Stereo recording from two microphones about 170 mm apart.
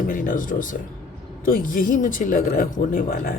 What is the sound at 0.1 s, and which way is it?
A woman's voice, 55° left (ahead or behind).